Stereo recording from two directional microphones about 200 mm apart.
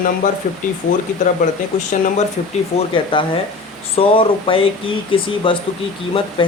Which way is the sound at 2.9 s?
25° left (ahead or behind).